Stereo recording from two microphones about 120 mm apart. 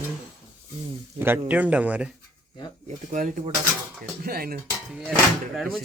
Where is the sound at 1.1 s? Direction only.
20° right (ahead or behind).